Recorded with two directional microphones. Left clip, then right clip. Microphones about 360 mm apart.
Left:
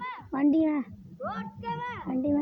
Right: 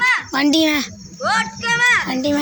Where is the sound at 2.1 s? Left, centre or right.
Left.